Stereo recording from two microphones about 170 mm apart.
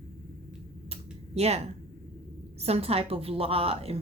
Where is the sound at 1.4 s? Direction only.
40° right (ahead or behind).